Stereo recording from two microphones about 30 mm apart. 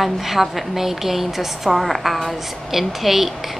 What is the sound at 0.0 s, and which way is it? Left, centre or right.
A woman's voice, centre.